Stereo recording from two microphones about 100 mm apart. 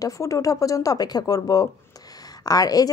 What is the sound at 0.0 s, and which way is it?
A woman's voice, 35° left (ahead or behind).